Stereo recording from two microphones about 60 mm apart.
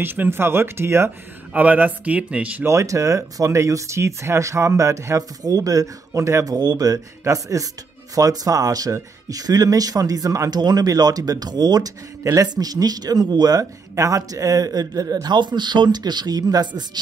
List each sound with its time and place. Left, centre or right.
0.0 s speech: right
1.5 s speech: right
2.6 s speech: right
6.4 s speech: right
12.2 s speech: right
12.5 s speech: right
16.3 s speech: right